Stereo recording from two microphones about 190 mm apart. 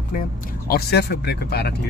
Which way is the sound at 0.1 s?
50° left (ahead or behind).